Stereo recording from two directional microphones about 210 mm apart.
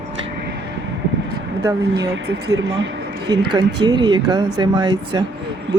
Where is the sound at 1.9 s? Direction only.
55° right (ahead or behind).